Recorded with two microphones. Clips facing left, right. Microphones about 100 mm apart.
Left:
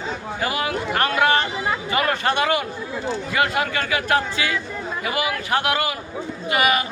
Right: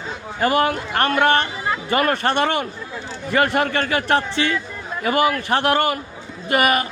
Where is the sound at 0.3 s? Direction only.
45° right (ahead or behind).